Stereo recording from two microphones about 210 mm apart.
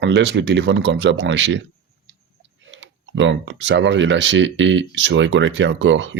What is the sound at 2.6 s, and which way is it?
Speech, 60° right (ahead or behind).